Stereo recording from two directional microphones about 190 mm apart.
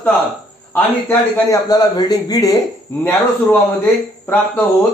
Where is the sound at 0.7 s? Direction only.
15° left (ahead or behind).